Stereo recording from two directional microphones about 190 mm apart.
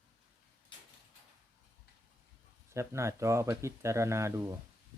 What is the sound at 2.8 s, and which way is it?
Speech, 15° right (ahead or behind).